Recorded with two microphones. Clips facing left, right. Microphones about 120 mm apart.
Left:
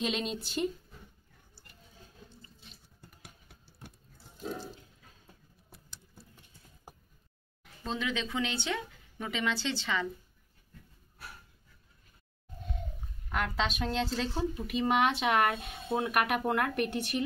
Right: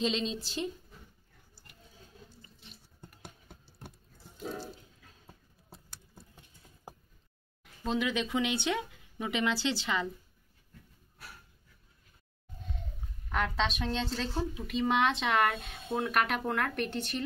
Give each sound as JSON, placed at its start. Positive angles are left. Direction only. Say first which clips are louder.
{"t": 0.1, "sound": "a woman's voice", "louder": "right 1 dB", "side_deg": 55}
{"t": 5.2, "sound": "a sound", "louder": "right 2 dB", "side_deg": -25}
{"t": 7.8, "sound": "speech", "louder": "right 3 dB", "side_deg": -15}
{"t": 13.3, "sound": "a woman's voice", "louder": "right 1 dB", "side_deg": 5}